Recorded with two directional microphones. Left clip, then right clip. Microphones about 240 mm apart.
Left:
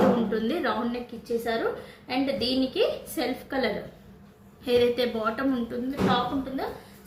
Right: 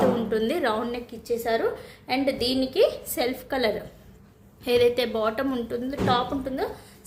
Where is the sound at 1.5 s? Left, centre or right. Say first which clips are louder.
Right 6 dB; right.